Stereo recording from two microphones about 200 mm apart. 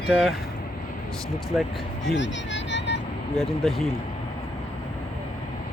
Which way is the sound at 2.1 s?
65° left (ahead or behind).